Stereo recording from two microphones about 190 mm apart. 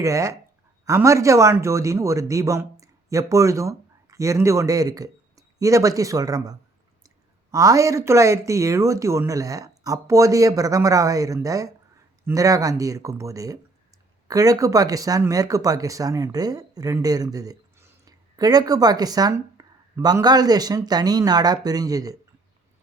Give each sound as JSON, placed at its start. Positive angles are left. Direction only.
{"t": 0.0, "sound": "speech", "side_deg": -15}